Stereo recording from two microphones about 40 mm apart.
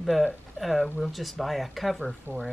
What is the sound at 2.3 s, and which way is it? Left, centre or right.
Speech, right.